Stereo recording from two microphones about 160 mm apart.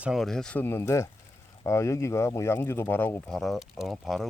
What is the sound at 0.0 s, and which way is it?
Speech, centre (ahead or behind).